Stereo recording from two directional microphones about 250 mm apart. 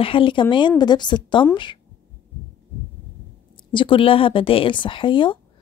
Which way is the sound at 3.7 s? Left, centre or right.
Centre.